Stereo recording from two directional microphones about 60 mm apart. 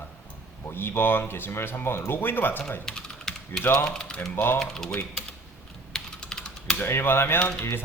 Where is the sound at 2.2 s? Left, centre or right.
Left.